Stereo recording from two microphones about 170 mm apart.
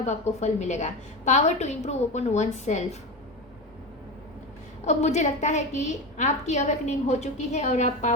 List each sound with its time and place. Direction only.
0.0 s a woman's voice: 40° left (ahead or behind)
4.9 s a woman's voice: 40° left (ahead or behind)